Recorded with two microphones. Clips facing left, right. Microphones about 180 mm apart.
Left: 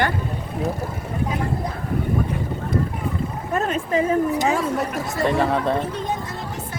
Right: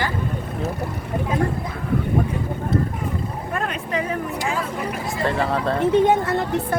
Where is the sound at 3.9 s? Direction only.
25° left (ahead or behind).